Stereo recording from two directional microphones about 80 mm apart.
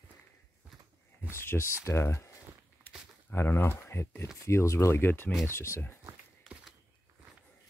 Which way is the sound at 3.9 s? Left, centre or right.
Left.